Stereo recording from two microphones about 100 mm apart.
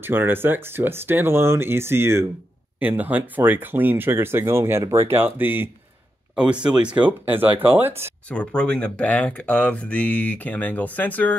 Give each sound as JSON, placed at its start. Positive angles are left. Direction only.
{"t": 0.0, "sound": "speech", "side_deg": -20}
{"t": 8.3, "sound": "speech", "side_deg": 10}